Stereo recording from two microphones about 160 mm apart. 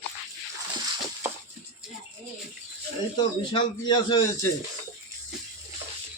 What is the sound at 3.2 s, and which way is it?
A man's voice, 30° left (ahead or behind).